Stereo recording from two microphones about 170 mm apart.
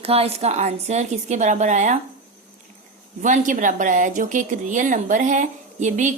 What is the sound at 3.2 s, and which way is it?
A woman's voice, 50° right (ahead or behind).